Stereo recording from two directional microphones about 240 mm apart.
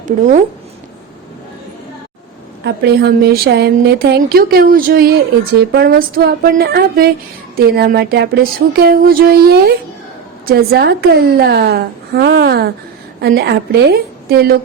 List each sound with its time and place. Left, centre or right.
2.6 s speech: right